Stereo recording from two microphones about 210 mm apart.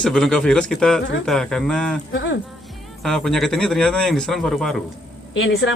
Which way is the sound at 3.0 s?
Centre (ahead or behind).